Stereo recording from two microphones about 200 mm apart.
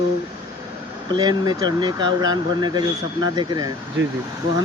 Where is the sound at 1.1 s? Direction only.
20° right (ahead or behind).